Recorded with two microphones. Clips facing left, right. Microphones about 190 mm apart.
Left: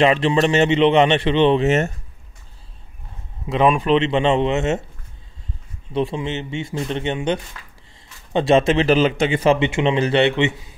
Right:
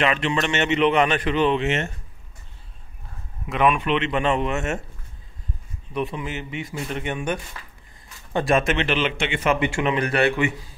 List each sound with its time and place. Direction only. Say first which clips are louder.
0.0 s speech: left 6 dB; 30° left (ahead or behind)
3.4 s speech: left 4 dB; 30° left (ahead or behind)
5.9 s speech: left 5 dB; 25° left (ahead or behind)